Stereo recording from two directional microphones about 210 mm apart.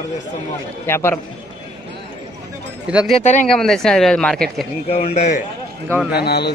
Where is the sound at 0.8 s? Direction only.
10° left (ahead or behind).